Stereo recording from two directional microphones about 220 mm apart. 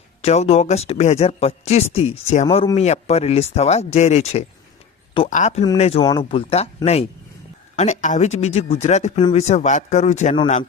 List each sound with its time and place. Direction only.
0.2 s speech: 30° left (ahead or behind)
7.8 s speech: 30° left (ahead or behind)